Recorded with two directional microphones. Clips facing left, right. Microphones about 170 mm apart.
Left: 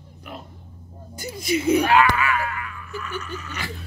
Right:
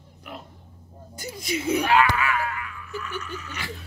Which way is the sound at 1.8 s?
60° left (ahead or behind).